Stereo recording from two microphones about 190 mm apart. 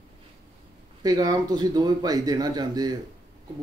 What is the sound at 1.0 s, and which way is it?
Speech, 20° right (ahead or behind).